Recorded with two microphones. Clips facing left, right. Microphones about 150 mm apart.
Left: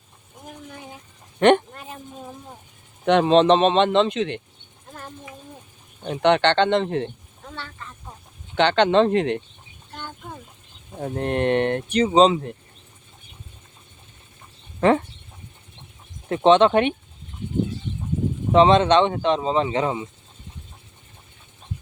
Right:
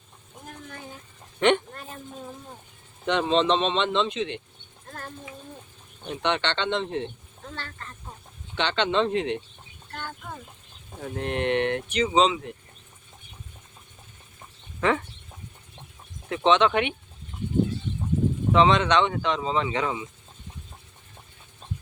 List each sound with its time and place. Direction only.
1.4 s speech: 50° left (ahead or behind)
3.1 s speech: 55° left (ahead or behind)
6.1 s speech: 50° left (ahead or behind)
8.5 s speech: 50° left (ahead or behind)
11.0 s speech: 40° left (ahead or behind)
14.8 s speech: 35° left (ahead or behind)
16.3 s speech: 35° left (ahead or behind)
18.5 s speech: 35° left (ahead or behind)